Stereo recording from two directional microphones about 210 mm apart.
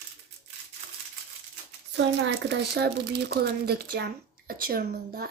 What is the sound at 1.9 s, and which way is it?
Speech, 60° right (ahead or behind).